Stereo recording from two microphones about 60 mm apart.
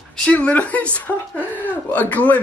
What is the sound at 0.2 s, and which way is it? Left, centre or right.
Speech, left.